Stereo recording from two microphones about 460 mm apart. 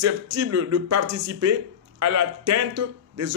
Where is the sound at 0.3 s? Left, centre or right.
Right.